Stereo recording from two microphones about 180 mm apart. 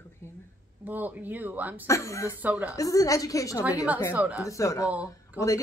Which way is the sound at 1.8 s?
15° left (ahead or behind).